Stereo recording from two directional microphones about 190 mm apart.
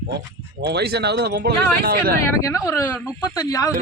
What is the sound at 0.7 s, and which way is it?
Speech, 60° right (ahead or behind).